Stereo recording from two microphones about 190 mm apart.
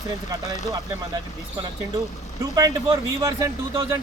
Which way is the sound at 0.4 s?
40° left (ahead or behind).